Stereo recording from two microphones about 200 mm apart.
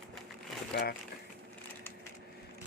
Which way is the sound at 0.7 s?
50° left (ahead or behind).